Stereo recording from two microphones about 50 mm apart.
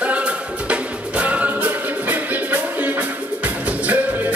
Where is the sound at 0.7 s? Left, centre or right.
Right.